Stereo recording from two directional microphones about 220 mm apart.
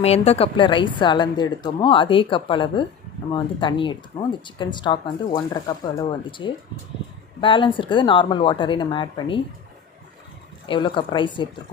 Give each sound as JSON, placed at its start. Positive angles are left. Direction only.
{"t": 0.0, "sound": "speech", "side_deg": 30}
{"t": 10.7, "sound": "speech", "side_deg": 20}